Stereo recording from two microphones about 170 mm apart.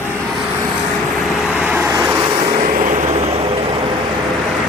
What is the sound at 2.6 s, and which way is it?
Vehicle, 50° right (ahead or behind).